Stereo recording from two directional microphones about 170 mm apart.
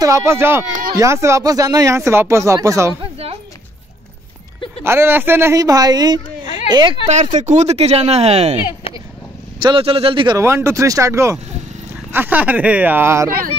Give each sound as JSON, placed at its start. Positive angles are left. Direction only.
{"t": 0.0, "sound": "speech", "side_deg": -15}
{"t": 3.0, "sound": "a sound", "side_deg": -35}
{"t": 4.8, "sound": "speech", "side_deg": -15}
{"t": 7.1, "sound": "speech", "side_deg": -45}
{"t": 9.6, "sound": "speech", "side_deg": -30}